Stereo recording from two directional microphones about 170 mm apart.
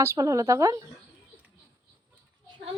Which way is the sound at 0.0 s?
15° right (ahead or behind).